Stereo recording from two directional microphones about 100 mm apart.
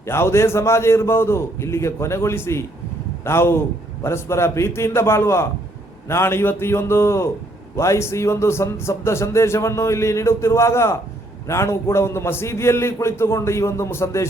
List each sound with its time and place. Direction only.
0.0 s speech: 25° left (ahead or behind)